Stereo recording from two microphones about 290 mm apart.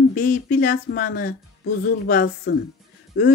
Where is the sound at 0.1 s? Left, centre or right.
Left.